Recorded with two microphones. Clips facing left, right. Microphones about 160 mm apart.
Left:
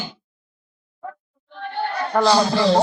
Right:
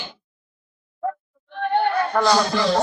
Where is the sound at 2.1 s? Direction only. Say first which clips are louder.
Left 5 dB; 5° left (ahead or behind).